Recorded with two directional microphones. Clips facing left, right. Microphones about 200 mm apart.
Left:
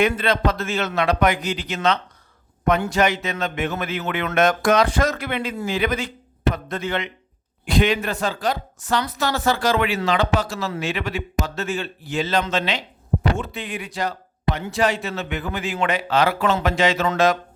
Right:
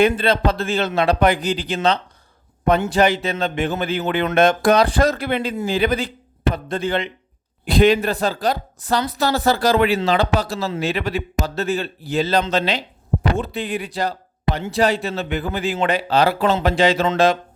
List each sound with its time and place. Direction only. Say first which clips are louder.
0.2 s speech: right 2 dB; 30° right (ahead or behind)